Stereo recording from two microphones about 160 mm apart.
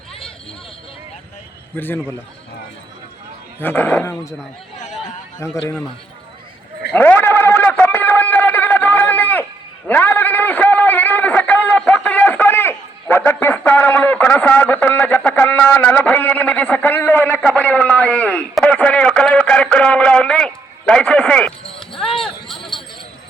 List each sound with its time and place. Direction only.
1.7 s speech: 10° left (ahead or behind)
3.6 s speech: 15° left (ahead or behind)
5.4 s speech: 15° left (ahead or behind)
6.9 s a sound: 10° left (ahead or behind)
21.7 s basketball bounce: 35° left (ahead or behind)
22.2 s jingle bell: centre (ahead or behind)